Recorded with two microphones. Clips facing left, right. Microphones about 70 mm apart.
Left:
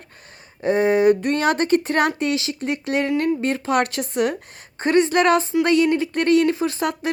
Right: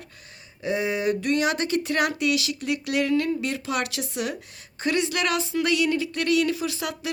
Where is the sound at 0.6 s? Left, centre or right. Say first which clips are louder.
Left 9 dB; left.